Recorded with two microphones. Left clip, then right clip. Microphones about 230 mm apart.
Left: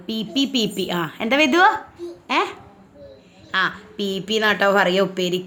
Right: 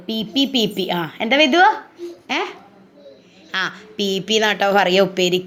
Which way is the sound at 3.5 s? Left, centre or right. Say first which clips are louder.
Left 2 dB; centre.